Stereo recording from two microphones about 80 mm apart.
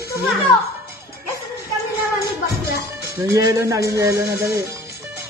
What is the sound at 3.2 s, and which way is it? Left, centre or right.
Speech, right.